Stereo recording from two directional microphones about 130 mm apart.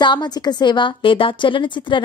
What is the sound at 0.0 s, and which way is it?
A woman's voice, 35° left (ahead or behind).